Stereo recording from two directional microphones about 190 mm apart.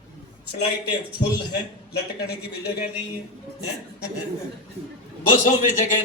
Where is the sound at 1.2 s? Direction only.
60° left (ahead or behind).